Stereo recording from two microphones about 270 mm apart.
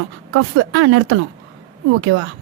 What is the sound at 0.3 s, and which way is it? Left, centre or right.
A woman's voice, right.